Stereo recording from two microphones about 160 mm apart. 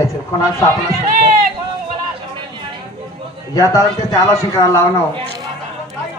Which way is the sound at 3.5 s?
20° left (ahead or behind).